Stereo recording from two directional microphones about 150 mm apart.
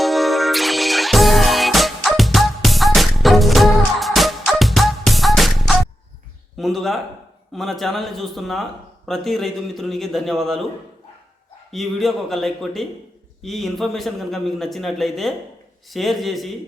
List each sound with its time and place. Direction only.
0.0 s music: centre (ahead or behind)
6.6 s a man's voice: centre (ahead or behind)
11.7 s a man's voice: centre (ahead or behind)